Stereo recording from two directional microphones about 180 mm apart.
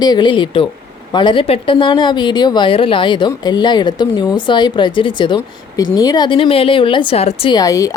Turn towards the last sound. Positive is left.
turn(degrees=20)  # may be behind; listen again after turning